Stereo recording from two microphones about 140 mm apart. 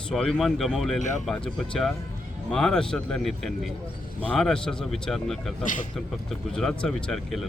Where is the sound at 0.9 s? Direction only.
60° left (ahead or behind).